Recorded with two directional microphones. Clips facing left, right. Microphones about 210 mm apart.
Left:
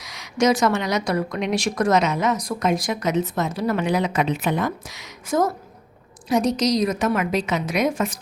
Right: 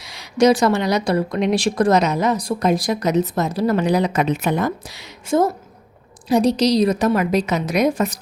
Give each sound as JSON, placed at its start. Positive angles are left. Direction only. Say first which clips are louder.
{"t": 0.0, "sound": "a woman's voice", "louder": "right 5 dB", "side_deg": -30}